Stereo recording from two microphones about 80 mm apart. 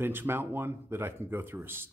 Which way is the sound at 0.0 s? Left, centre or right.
Right.